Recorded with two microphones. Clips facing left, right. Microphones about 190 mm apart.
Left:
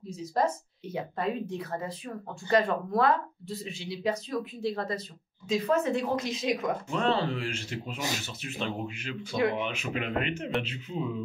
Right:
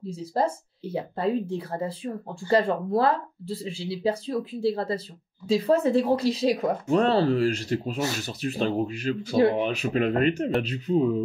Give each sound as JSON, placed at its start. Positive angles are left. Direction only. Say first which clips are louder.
{"t": 0.0, "sound": "speech", "louder": "right 2 dB", "side_deg": -30}